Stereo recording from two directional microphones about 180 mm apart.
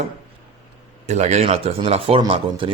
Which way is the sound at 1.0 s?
40° right (ahead or behind).